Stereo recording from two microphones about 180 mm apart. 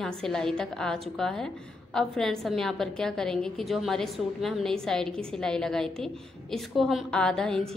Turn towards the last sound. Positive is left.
turn(degrees=5)  # may be behind; listen again after turning